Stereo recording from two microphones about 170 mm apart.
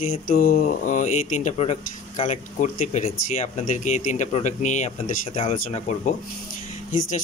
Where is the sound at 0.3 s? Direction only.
55° left (ahead or behind).